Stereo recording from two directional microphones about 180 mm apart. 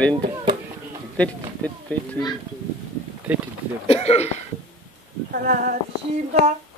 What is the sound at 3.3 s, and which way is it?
Speech, 10° right (ahead or behind).